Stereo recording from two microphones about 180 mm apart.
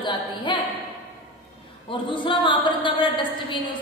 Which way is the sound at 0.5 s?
25° left (ahead or behind).